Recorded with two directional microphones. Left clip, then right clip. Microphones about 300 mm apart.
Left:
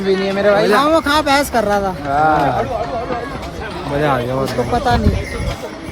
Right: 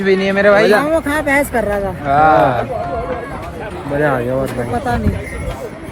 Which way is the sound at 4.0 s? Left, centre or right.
Centre.